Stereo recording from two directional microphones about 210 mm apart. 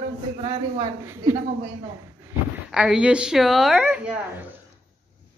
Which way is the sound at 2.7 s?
5° right (ahead or behind).